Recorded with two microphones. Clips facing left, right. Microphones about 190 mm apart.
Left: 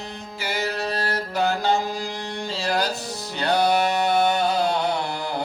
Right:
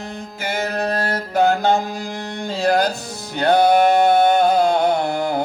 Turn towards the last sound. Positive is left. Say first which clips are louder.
# right 7 dB
turn(degrees=-50)  # may be behind; listen again after turning